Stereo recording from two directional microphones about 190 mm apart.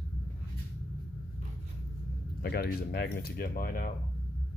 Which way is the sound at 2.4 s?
55° left (ahead or behind).